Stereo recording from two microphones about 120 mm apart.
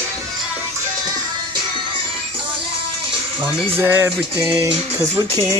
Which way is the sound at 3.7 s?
20° right (ahead or behind).